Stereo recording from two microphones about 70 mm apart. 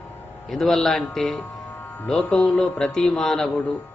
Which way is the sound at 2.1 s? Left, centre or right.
Centre.